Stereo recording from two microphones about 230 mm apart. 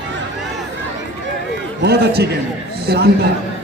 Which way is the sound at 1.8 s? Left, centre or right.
Right.